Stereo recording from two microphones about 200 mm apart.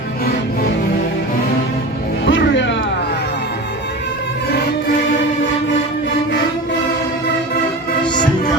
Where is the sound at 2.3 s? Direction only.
65° left (ahead or behind).